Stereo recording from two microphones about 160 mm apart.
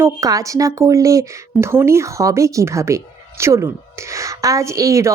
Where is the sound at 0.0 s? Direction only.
20° right (ahead or behind).